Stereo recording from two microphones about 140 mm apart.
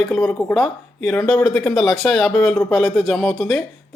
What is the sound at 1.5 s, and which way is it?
Speech, centre (ahead or behind).